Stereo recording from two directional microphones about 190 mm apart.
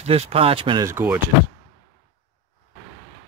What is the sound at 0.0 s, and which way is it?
Speech, 30° right (ahead or behind).